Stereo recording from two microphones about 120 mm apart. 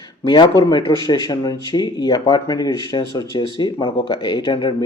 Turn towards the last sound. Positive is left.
turn(degrees=45)  # may be behind; listen again after turning